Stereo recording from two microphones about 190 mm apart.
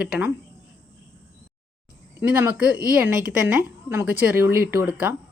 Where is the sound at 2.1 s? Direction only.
10° right (ahead or behind).